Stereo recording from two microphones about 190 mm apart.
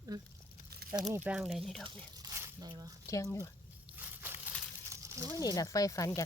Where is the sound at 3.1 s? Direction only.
15° left (ahead or behind).